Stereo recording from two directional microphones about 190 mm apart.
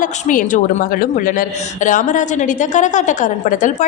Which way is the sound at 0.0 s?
45° left (ahead or behind).